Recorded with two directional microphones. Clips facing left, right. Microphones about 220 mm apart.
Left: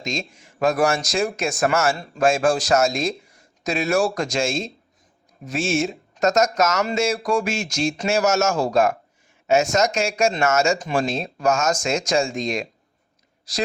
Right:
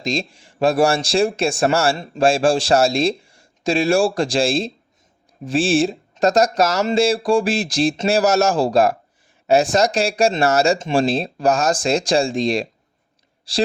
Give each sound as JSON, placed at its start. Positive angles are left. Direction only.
{"t": 0.0, "sound": "speech", "side_deg": -35}